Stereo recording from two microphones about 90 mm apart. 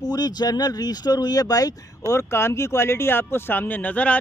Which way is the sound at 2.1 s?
30° left (ahead or behind).